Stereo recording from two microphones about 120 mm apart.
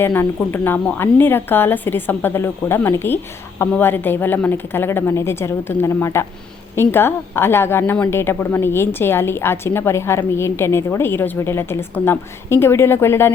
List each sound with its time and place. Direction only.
0.0 s a woman's voice: 20° left (ahead or behind)